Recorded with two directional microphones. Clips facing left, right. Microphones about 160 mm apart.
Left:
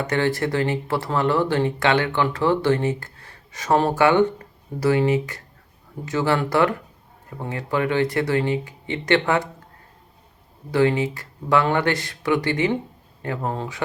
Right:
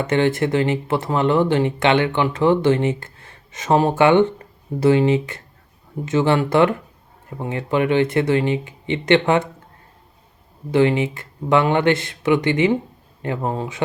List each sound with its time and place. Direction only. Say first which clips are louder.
0.0 s speech: right 4 dB; 25° right (ahead or behind)
10.7 s speech: right 3 dB; 20° right (ahead or behind)